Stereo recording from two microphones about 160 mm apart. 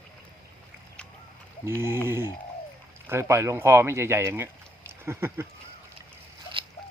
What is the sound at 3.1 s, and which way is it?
Speech, 15° right (ahead or behind).